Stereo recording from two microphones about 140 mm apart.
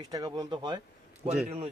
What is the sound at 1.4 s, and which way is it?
Speech, 50° right (ahead or behind).